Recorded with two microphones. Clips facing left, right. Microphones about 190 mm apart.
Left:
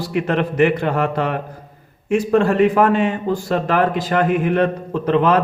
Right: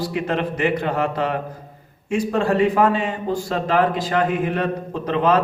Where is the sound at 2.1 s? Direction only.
55° left (ahead or behind).